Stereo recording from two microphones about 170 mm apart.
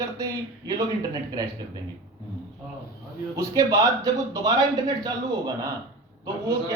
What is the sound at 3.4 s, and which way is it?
A man's voice, 20° right (ahead or behind).